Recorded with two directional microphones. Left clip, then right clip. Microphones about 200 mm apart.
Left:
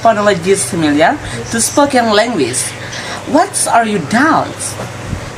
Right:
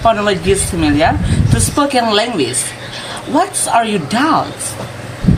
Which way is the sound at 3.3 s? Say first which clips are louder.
Left 2 dB; 20° left (ahead or behind).